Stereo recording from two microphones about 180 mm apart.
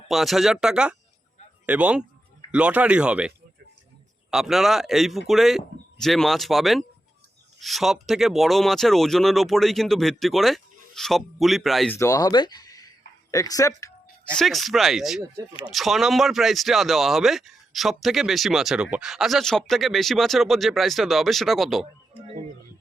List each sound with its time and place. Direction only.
0.1 s speech: centre (ahead or behind)
11.9 s speech: 15° left (ahead or behind)
14.3 s speech: centre (ahead or behind)